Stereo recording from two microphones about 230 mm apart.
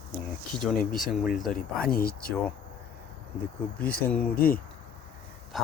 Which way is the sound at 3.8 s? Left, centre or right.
Left.